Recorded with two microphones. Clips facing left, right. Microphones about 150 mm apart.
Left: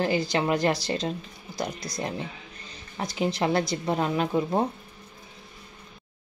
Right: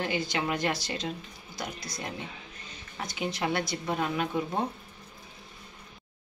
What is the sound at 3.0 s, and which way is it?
A woman's voice, 35° left (ahead or behind).